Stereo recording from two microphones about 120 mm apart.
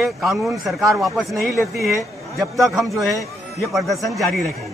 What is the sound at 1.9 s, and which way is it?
Speech, 25° right (ahead or behind).